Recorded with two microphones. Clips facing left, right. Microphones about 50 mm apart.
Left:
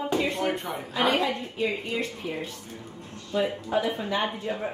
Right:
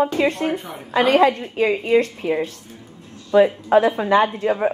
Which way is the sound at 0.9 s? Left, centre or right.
Right.